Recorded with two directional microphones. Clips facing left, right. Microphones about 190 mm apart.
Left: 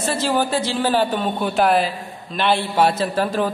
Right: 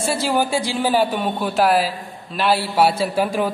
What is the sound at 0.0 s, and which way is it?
A man's voice, 10° right (ahead or behind).